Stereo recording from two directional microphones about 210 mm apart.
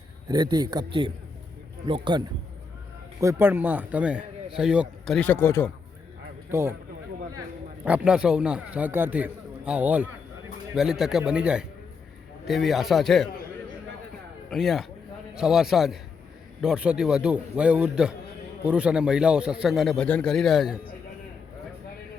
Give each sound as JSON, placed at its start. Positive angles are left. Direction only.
{"t": 0.3, "sound": "a man's voice", "side_deg": -20}
{"t": 6.5, "sound": "a man's voice", "side_deg": -10}
{"t": 7.9, "sound": "a man's voice", "side_deg": -5}
{"t": 14.5, "sound": "a man's voice", "side_deg": 0}